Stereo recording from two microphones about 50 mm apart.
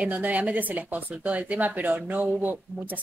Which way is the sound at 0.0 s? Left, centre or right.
Right.